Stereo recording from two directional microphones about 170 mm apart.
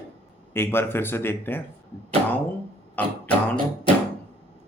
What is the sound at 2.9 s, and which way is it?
Music, 10° left (ahead or behind).